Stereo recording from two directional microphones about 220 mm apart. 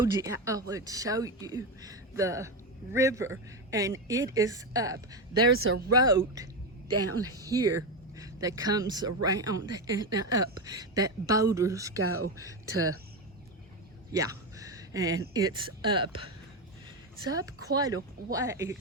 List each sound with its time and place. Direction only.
0.0 s speech: 15° right (ahead or behind)
5.4 s speech: 85° right
6.0 s speech: 15° right (ahead or behind)
6.9 s a woman's voice: 90° right
7.3 s speech: 15° right (ahead or behind)
11.9 s a woman's voice: 90° right
14.1 s speech: 15° right (ahead or behind)